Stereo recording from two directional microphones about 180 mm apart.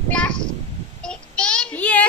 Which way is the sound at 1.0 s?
5° left (ahead or behind).